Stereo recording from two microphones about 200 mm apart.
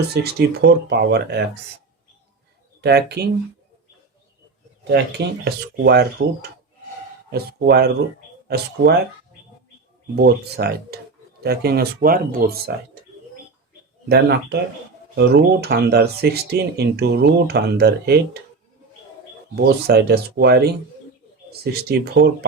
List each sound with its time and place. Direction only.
0.1 s speech: 55° right (ahead or behind)
2.8 s speech: 55° right (ahead or behind)
4.9 s speech: 55° right (ahead or behind)
10.2 s speech: 55° right (ahead or behind)
14.1 s speech: 55° right (ahead or behind)
19.5 s speech: 55° right (ahead or behind)